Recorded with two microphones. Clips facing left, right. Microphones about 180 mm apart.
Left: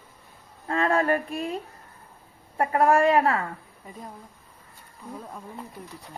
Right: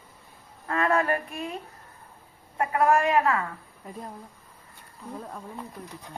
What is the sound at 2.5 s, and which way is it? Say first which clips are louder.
Speech: left 2 dB; 40° left (ahead or behind).